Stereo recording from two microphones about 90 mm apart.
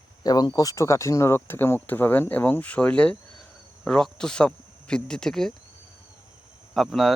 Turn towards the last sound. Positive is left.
turn(degrees=0)  # may be behind; listen again after turning